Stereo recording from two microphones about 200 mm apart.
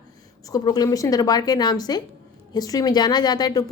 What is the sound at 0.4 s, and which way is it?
A woman's voice, 20° left (ahead or behind).